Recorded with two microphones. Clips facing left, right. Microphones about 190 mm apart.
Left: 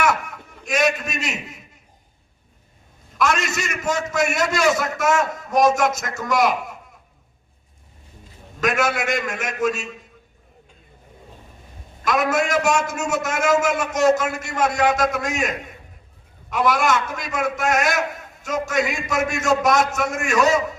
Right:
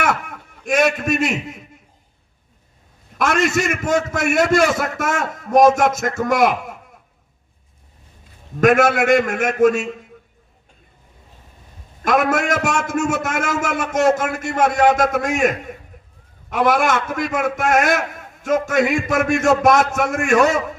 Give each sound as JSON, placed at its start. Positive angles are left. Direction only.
{"t": 0.0, "sound": "a sound", "side_deg": -50}
{"t": 3.2, "sound": "a man's voice", "side_deg": -50}
{"t": 8.6, "sound": "a man's voice", "side_deg": -55}
{"t": 12.0, "sound": "a man's voice", "side_deg": -55}